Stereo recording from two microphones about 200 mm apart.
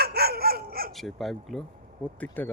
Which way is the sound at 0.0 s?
50° right (ahead or behind).